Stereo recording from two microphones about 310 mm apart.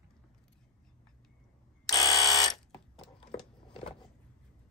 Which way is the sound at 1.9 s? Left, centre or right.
Centre.